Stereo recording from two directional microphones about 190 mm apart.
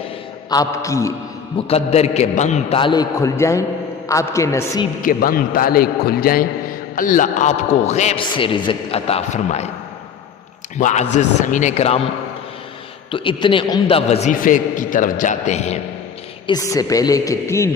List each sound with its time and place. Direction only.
0.5 s speech: 20° left (ahead or behind)
1.6 s a man's voice: 35° left (ahead or behind); by 4.9 s 15° left (ahead or behind)
5.0 s a man's voice: 50° left (ahead or behind)
10.8 s a man's voice: 40° left (ahead or behind)
13.1 s a man's voice: 25° left (ahead or behind)
16.5 s speech: 20° left (ahead or behind)